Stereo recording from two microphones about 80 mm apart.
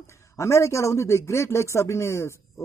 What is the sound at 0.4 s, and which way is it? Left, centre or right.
Speech, left.